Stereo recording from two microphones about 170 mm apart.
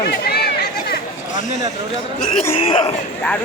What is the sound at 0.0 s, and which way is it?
Chatter, 70° left (ahead or behind).